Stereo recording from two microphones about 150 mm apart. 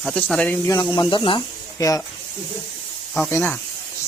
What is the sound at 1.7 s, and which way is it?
Speech, 25° left (ahead or behind).